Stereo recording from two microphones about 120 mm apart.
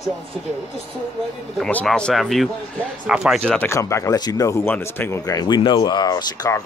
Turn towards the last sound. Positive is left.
turn(degrees=30)  # may be behind; listen again after turning